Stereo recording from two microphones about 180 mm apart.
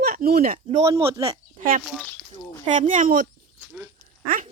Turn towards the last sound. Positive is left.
turn(degrees=-45)  # may be behind; listen again after turning